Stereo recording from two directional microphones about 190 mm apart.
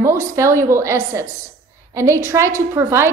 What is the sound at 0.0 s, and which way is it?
A woman's voice, 15° right (ahead or behind).